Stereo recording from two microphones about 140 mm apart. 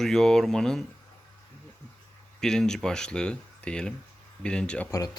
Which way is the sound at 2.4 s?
5° left (ahead or behind).